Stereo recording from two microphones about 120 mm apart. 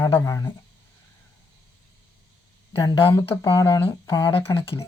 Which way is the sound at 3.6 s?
35° left (ahead or behind).